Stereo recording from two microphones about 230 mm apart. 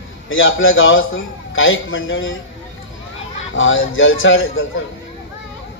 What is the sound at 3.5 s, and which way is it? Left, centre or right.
A man's voice, left.